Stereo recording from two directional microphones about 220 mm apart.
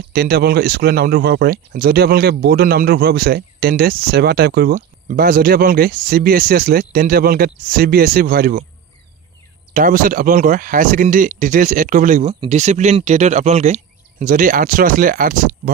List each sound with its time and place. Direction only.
0.1 s speech: 45° right (ahead or behind)
9.8 s speech: 40° right (ahead or behind)